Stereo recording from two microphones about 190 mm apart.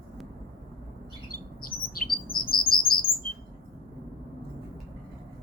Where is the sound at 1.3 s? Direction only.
50° left (ahead or behind).